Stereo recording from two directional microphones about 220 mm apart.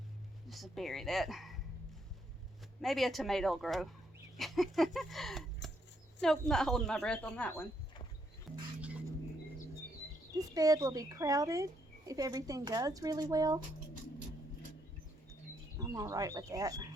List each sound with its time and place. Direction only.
0.4 s speech: centre (ahead or behind)
2.8 s speech: centre (ahead or behind)
8.8 s a sound: 5° right (ahead or behind)
10.3 s speech: 15° right (ahead or behind)
15.8 s speech: 15° right (ahead or behind)